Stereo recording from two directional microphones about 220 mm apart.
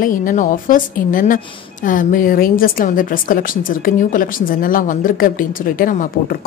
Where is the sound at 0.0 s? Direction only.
35° left (ahead or behind).